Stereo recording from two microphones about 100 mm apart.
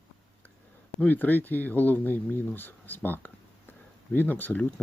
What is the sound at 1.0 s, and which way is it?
Speech, 20° left (ahead or behind).